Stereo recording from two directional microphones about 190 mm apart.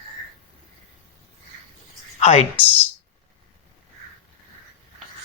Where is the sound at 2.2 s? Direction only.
35° left (ahead or behind).